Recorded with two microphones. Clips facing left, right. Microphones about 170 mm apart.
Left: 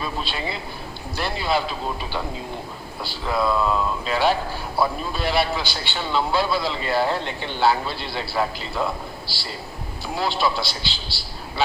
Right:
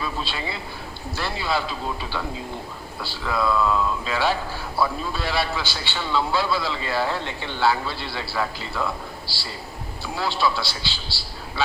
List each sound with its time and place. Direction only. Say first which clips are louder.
0.0 s a man's voice: left 1 dB; 20° left (ahead or behind)
3.0 s a man's voice: left 1 dB; 20° left (ahead or behind)